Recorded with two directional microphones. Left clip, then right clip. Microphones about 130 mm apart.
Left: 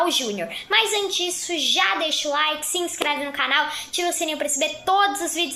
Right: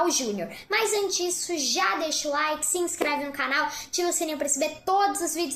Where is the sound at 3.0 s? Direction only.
15° right (ahead or behind).